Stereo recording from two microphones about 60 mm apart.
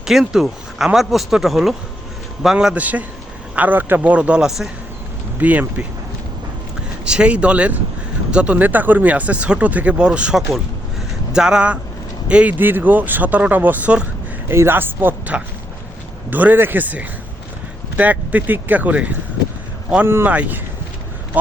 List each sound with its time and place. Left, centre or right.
0.0 s speech: centre
2.7 s speech: right
4.4 s speech: centre
5.4 s speech: right
7.0 s speech: centre
12.5 s speech: right
14.4 s a man's voice: right
15.3 s speech: right
20.2 s speech: right